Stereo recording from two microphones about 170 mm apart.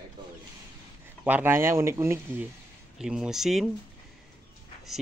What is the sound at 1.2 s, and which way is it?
Speech, 10° right (ahead or behind).